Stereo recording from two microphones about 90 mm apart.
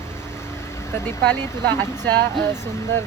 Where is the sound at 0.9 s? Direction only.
25° left (ahead or behind).